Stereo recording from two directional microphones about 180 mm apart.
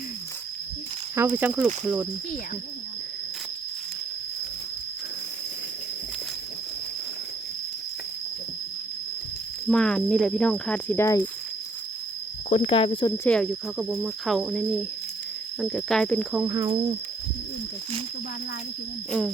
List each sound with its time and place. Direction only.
1.1 s speech: 10° right (ahead or behind)
9.6 s speech: 5° left (ahead or behind)
12.5 s speech: 45° left (ahead or behind)
12.7 s speech: 30° left (ahead or behind)
13.2 s speech: 5° left (ahead or behind)
16.4 s speech: 15° right (ahead or behind)